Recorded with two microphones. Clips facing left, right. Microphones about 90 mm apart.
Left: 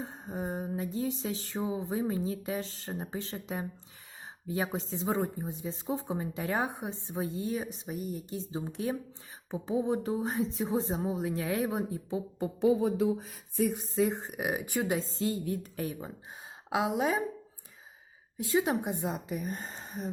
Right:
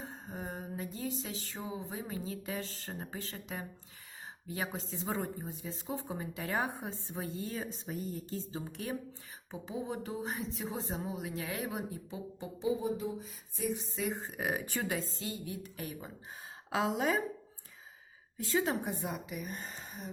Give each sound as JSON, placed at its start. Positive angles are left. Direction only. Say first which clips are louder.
{"t": 0.0, "sound": "a sound", "louder": "left 6 dB", "side_deg": 20}
{"t": 4.4, "sound": "speech", "louder": "left 6 dB", "side_deg": 25}
{"t": 12.4, "sound": "music", "louder": "left 7 dB", "side_deg": 60}
{"t": 13.7, "sound": "a woman's voice", "louder": "left 9 dB", "side_deg": 35}
{"t": 14.1, "sound": "speech", "louder": "left 3 dB", "side_deg": 20}
{"t": 16.6, "sound": "a woman's voice", "louder": "left 3 dB", "side_deg": 15}
{"t": 18.3, "sound": "speech", "louder": "left 4 dB", "side_deg": 15}